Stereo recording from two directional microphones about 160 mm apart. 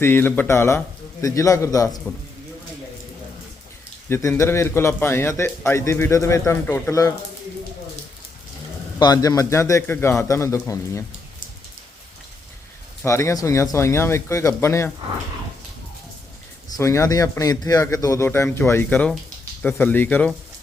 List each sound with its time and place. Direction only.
0.0 s speech: 15° left (ahead or behind)
4.1 s speech: 15° left (ahead or behind)
9.0 s speech: 25° left (ahead or behind)
13.1 s speech: 20° left (ahead or behind)
16.7 s speech: 20° left (ahead or behind)